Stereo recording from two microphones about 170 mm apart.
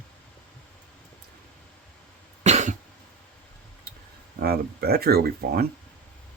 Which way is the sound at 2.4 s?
45° right (ahead or behind).